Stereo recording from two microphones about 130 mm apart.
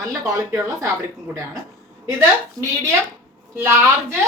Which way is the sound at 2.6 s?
20° right (ahead or behind).